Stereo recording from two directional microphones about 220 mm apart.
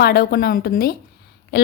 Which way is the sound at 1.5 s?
45° left (ahead or behind).